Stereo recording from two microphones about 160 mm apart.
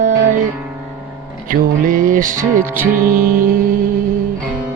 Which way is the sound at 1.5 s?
60° right (ahead or behind).